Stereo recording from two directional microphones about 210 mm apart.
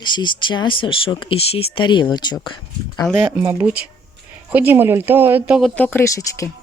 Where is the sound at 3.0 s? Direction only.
Centre (ahead or behind).